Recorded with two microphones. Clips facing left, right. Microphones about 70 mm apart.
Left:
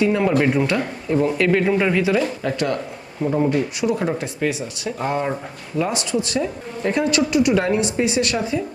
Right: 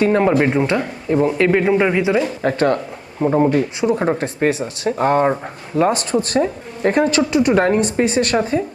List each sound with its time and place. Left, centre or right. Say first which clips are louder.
0.0 s speech: right 3 dB; right
0.3 s speech: right 2 dB; right
2.4 s speech: right 5 dB; right